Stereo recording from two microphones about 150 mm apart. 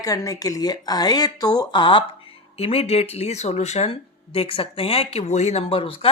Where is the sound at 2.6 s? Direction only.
45° left (ahead or behind).